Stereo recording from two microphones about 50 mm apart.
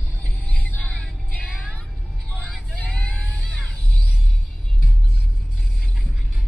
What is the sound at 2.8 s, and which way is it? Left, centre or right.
Vehicle, left.